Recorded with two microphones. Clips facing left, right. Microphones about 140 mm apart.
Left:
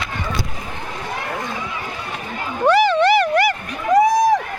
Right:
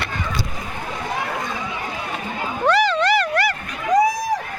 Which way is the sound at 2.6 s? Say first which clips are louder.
Left 4 dB; 20° left (ahead or behind).